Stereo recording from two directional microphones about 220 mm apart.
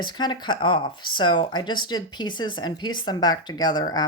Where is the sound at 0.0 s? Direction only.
20° left (ahead or behind).